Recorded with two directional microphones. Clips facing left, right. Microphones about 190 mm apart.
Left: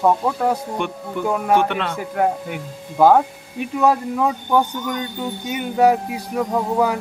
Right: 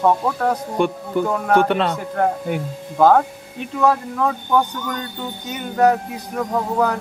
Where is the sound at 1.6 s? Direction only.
35° right (ahead or behind).